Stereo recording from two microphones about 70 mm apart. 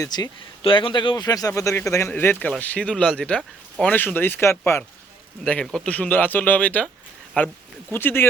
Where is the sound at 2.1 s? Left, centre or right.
Left.